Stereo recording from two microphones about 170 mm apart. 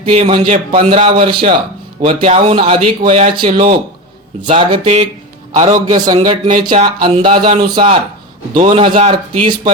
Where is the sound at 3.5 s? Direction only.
55° right (ahead or behind).